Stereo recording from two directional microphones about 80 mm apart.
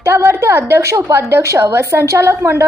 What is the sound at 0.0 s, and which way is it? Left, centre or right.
A woman's voice, right.